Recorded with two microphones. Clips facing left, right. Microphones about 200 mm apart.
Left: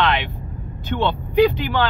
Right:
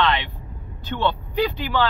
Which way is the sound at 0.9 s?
10° left (ahead or behind).